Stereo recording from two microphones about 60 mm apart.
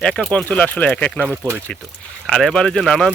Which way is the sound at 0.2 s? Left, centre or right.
Left.